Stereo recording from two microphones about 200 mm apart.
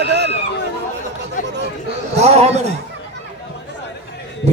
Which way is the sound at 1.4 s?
40° left (ahead or behind).